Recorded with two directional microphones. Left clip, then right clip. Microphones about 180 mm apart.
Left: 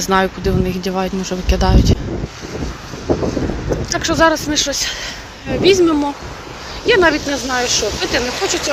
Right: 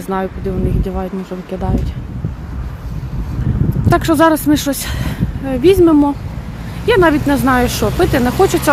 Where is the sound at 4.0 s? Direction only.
30° right (ahead or behind).